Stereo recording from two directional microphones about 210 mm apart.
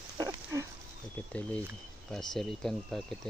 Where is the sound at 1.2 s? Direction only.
10° left (ahead or behind).